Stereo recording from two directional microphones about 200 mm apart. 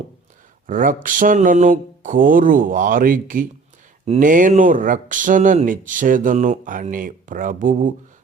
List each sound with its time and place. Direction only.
0.7 s speech: 40° right (ahead or behind)